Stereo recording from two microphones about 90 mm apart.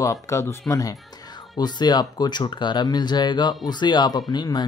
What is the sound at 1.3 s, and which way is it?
Speech, 50° left (ahead or behind).